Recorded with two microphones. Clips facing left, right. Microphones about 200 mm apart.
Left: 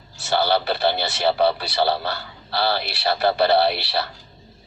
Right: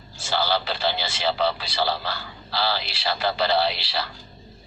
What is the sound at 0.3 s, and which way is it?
A man's voice, 55° left (ahead or behind).